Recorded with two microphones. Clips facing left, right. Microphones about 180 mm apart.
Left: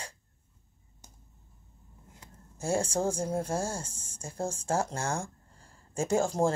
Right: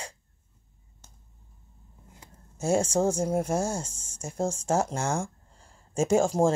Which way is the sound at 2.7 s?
25° right (ahead or behind).